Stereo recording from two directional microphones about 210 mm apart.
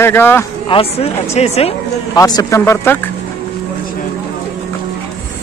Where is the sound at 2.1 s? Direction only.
15° left (ahead or behind).